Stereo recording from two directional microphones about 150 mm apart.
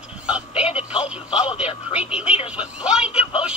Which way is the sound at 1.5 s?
35° left (ahead or behind).